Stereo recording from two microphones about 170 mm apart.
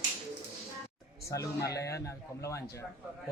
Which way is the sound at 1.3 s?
20° left (ahead or behind).